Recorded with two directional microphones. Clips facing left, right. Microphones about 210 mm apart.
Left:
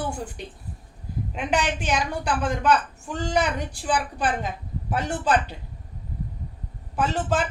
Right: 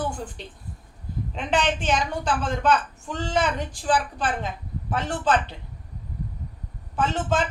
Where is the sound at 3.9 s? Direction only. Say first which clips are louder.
Right 1 dB; 10° left (ahead or behind).